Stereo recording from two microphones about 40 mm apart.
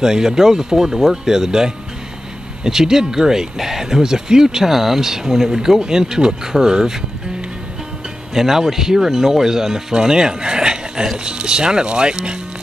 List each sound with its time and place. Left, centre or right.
0.0 s speech: centre
8.4 s speech: centre